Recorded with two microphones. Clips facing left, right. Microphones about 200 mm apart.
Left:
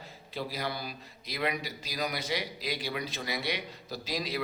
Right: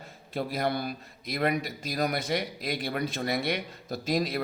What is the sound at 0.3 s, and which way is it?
A man's voice, 55° right (ahead or behind).